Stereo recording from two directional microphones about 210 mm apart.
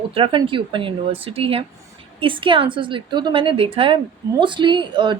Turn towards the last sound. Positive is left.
turn(degrees=-20)  # may be behind; listen again after turning